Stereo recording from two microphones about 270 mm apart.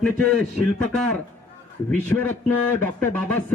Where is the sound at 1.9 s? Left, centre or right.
Centre.